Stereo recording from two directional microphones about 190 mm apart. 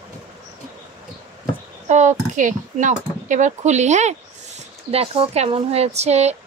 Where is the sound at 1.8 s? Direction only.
40° right (ahead or behind).